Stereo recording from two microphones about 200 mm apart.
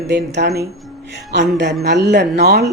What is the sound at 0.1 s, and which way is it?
Speech, 55° right (ahead or behind).